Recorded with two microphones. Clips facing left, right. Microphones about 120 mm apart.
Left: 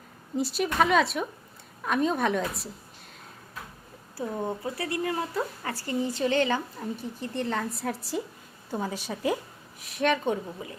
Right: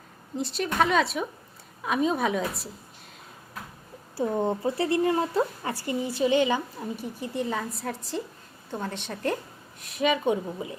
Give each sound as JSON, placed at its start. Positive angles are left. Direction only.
{"t": 0.3, "sound": "a woman's voice", "side_deg": 5}
{"t": 4.2, "sound": "a woman's voice", "side_deg": -25}
{"t": 10.2, "sound": "speech", "side_deg": -20}